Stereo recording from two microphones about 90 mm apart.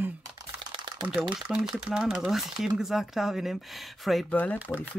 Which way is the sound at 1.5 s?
5° right (ahead or behind).